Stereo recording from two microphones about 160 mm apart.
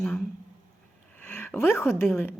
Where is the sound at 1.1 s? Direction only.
15° left (ahead or behind).